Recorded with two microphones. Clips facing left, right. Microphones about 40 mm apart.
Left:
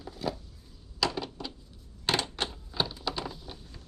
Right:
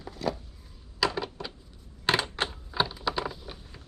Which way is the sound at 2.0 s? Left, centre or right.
Centre.